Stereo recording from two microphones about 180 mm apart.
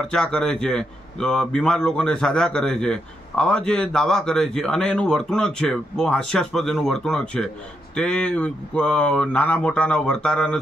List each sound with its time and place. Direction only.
0.1 s a man's voice: 5° left (ahead or behind)